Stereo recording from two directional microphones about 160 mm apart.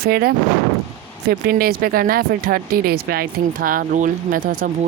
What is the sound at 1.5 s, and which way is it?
A woman's voice, 70° right (ahead or behind).